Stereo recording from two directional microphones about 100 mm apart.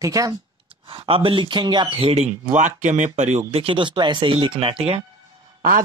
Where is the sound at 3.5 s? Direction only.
65° right (ahead or behind).